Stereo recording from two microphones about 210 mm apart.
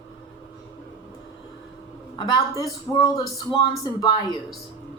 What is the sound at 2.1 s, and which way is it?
A woman's voice, 20° left (ahead or behind).